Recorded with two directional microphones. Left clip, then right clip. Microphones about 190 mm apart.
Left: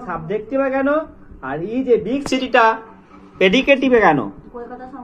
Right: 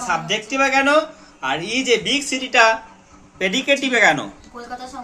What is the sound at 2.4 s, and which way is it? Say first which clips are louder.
Speech: left 1 dB; 10° left (ahead or behind).